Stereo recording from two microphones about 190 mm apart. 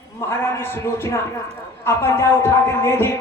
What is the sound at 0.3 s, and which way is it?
A man's voice, 10° left (ahead or behind).